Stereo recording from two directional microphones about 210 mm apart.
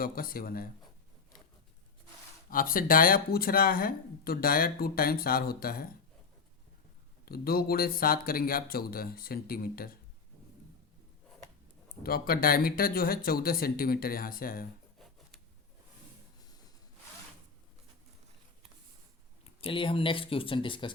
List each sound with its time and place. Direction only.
0.0 s speech: 45° left (ahead or behind)
2.5 s speech: 40° left (ahead or behind)
7.3 s speech: 45° left (ahead or behind)
12.0 s speech: 45° left (ahead or behind)
19.5 s speech: 25° left (ahead or behind)